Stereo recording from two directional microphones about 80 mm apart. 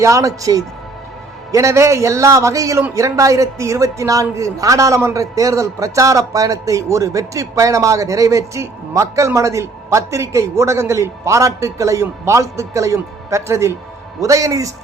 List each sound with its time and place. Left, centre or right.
0.0 s speech: right